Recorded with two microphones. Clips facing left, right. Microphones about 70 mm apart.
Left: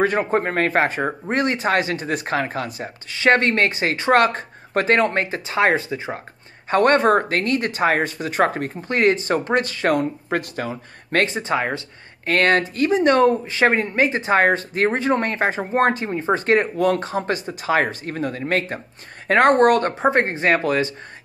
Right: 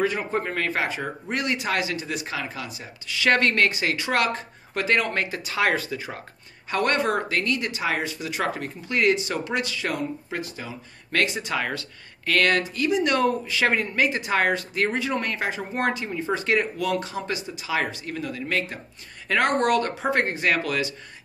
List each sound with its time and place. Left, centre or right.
0.0 s speech: left
6.7 s speech: left